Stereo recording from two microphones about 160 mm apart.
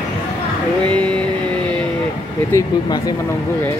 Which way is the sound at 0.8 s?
10° left (ahead or behind).